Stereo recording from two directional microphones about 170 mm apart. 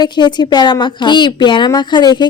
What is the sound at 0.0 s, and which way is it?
A woman's voice, 25° left (ahead or behind).